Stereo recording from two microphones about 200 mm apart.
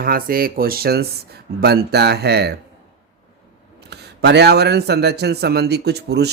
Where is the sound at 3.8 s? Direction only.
55° right (ahead or behind).